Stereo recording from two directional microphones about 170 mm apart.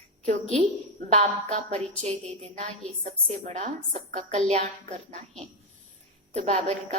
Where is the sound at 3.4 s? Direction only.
40° right (ahead or behind).